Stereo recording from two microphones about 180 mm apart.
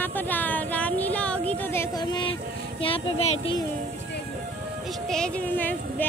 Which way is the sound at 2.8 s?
35° left (ahead or behind).